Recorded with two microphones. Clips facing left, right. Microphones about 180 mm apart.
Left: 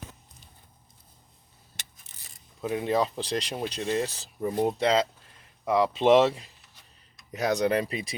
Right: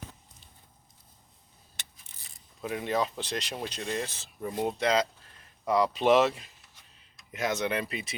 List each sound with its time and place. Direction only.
2.6 s speech: 25° left (ahead or behind)